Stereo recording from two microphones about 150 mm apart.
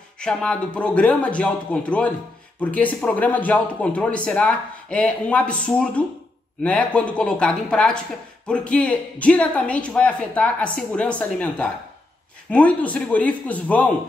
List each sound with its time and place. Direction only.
0.2 s speech: 5° left (ahead or behind)